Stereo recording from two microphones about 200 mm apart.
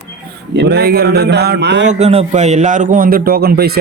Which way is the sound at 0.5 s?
55° right (ahead or behind).